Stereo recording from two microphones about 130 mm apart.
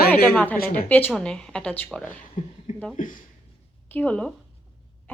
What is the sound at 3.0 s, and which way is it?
Speech, 90° left.